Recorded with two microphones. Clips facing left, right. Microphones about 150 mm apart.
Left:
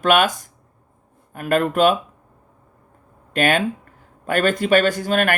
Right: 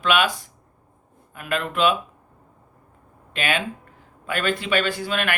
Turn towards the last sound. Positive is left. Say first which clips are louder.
# left 6 dB
turn(degrees=45)  # may be behind; listen again after turning